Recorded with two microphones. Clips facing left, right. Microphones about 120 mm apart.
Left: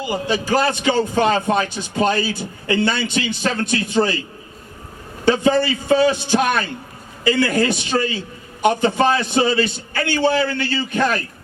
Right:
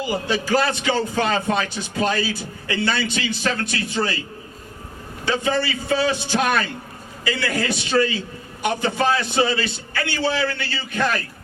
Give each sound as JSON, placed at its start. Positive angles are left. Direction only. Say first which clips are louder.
{"t": 0.1, "sound": "a man's voice", "louder": "left 2 dB", "side_deg": 20}
{"t": 5.2, "sound": "a man's voice", "louder": "left 6 dB", "side_deg": 30}
{"t": 9.0, "sound": "a man's voice", "louder": "left 3 dB", "side_deg": 25}